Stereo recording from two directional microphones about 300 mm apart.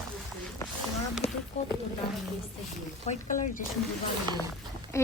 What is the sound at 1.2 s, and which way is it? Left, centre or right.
Speech, centre.